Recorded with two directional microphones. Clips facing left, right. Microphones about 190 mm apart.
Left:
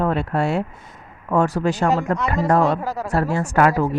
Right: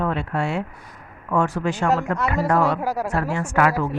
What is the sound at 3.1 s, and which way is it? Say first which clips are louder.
Speech: left 3 dB; 35° left (ahead or behind).